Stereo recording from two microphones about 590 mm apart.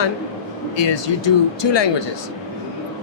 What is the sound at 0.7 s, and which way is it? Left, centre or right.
Speech, left.